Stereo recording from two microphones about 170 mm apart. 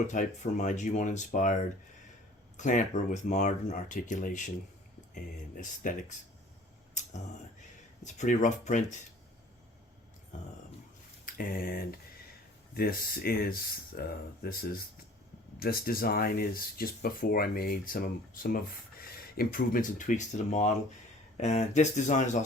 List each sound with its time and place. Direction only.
0.1 s speech: 45° left (ahead or behind)
2.6 s speech: 45° left (ahead or behind)
8.0 s speech: 45° left (ahead or behind)
11.3 s speech: 55° left (ahead or behind)